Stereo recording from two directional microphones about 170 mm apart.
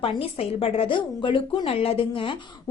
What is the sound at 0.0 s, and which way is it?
Speech, 35° left (ahead or behind).